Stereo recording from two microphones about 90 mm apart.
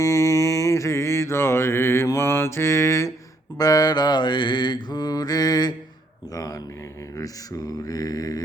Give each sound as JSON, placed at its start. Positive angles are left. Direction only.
{"t": 0.0, "sound": "mantra", "side_deg": 35}
{"t": 3.6, "sound": "mantra", "side_deg": 45}
{"t": 6.3, "sound": "speech", "side_deg": 40}
{"t": 7.2, "sound": "mantra", "side_deg": 40}